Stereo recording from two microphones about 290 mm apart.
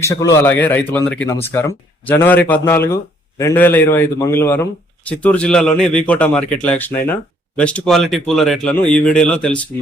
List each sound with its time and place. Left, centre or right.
0.0 s speech: centre